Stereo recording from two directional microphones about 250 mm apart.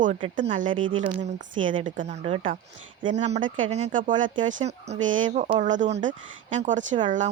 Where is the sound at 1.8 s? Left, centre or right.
Right.